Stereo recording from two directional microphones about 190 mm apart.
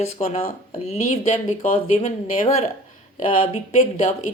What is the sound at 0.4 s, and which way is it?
Speech, 40° left (ahead or behind).